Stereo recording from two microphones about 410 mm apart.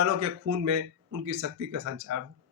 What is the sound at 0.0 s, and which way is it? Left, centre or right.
Speech, right.